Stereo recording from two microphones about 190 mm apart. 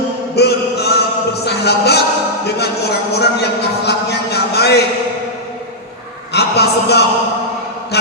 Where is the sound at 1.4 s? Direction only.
60° left (ahead or behind).